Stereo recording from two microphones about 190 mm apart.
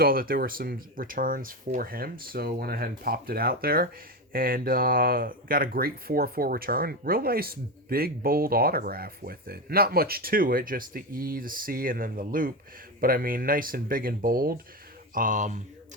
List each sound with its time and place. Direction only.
0.0 s speech: 50° right (ahead or behind)